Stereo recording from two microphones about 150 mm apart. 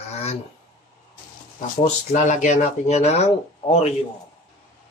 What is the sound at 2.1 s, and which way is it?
Speech, 50° left (ahead or behind).